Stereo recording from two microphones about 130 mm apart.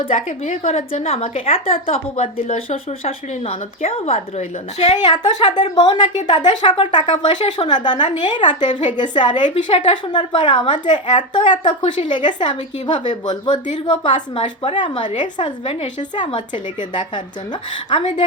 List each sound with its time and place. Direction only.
0.4 s speech: 60° left (ahead or behind)
4.9 s a woman's voice: 30° left (ahead or behind)
15.0 s a woman's voice: 70° left (ahead or behind)
15.4 s a woman's voice: 45° left (ahead or behind)